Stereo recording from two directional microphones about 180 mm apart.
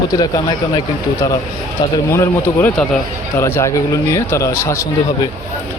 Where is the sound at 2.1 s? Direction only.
10° left (ahead or behind).